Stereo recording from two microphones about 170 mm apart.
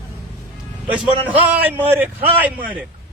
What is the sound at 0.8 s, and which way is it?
A man's voice, 10° right (ahead or behind).